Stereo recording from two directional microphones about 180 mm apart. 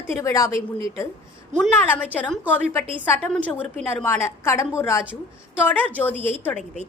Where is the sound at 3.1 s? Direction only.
5° left (ahead or behind).